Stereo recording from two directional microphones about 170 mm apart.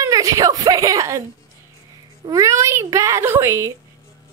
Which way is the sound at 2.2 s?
20° right (ahead or behind).